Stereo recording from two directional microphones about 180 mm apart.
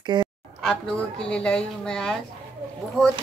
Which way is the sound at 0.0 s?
25° right (ahead or behind).